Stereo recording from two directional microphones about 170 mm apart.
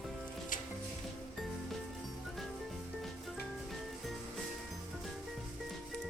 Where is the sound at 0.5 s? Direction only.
50° left (ahead or behind).